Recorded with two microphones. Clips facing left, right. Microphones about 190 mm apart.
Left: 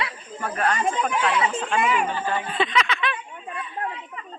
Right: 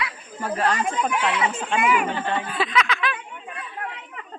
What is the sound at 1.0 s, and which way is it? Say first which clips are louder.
Speech: even; 30° left (ahead or behind).